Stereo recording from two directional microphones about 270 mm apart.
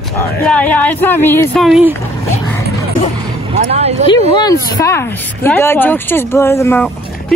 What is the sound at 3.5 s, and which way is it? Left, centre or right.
Vehicle, right.